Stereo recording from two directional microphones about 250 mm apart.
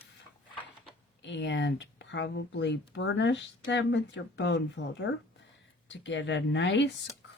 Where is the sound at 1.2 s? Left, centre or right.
Left.